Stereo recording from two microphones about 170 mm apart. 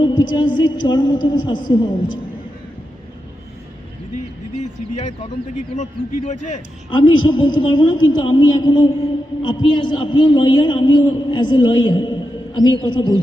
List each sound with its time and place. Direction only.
0.0 s a man's voice: 25° left (ahead or behind)
4.6 s speech: 45° left (ahead or behind)
6.9 s a man's voice: 30° left (ahead or behind)